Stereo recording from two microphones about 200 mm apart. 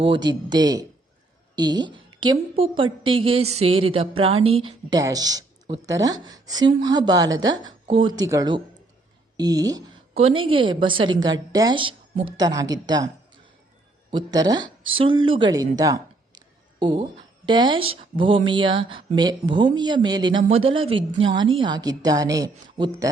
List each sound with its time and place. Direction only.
0.0 s a woman's voice: 25° right (ahead or behind)
10.2 s a woman's voice: 30° right (ahead or behind)
14.1 s a woman's voice: 20° right (ahead or behind)
17.4 s a woman's voice: 25° right (ahead or behind)